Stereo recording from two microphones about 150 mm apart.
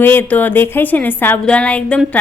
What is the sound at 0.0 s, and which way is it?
Speech, 15° left (ahead or behind).